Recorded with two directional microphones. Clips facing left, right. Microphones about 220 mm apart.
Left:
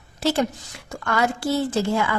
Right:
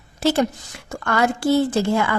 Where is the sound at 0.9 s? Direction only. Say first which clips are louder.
Right 2 dB; 55° right (ahead or behind).